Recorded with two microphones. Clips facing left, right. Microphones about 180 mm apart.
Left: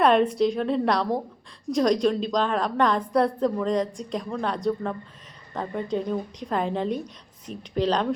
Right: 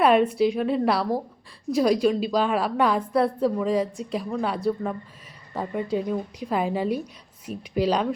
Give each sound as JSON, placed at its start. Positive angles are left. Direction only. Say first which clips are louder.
{"t": 0.0, "sound": "a woman's voice", "louder": "right 1 dB", "side_deg": -5}